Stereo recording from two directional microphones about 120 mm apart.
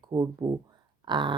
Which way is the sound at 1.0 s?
40° right (ahead or behind).